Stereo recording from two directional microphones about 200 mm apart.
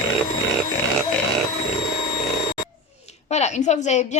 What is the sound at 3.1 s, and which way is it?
A woman's voice, 35° left (ahead or behind).